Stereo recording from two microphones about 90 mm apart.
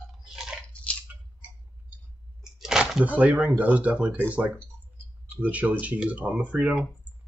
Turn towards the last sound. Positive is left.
turn(degrees=-10)  # may be behind; listen again after turning